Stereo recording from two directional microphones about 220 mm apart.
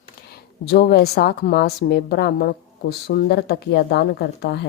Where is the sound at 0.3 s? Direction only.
45° left (ahead or behind).